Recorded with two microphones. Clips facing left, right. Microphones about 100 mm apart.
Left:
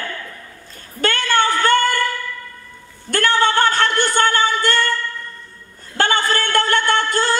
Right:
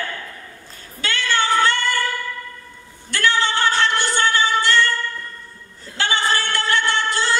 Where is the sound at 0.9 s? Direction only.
50° left (ahead or behind).